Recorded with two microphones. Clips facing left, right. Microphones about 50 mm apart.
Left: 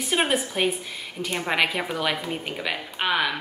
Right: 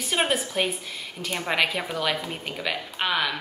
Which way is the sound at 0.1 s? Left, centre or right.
Centre.